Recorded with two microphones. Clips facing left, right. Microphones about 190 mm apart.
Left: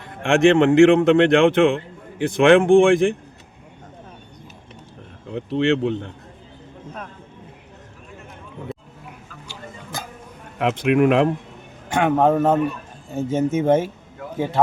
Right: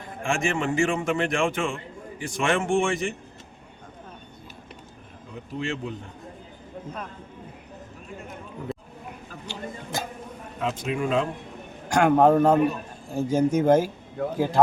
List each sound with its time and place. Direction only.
0.0 s a man's voice: 65° left (ahead or behind)
5.3 s speech: 70° left (ahead or behind)
10.6 s speech: 70° left (ahead or behind)
11.9 s a man's voice: centre (ahead or behind)